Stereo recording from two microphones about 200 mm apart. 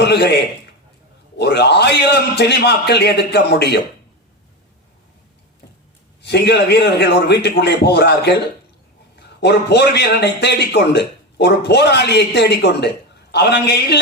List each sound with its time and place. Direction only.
0.0 s a man's voice: 55° left (ahead or behind)
6.2 s a man's voice: 55° left (ahead or behind)